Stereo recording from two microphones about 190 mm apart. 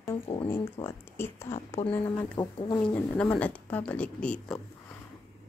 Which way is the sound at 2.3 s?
25° left (ahead or behind).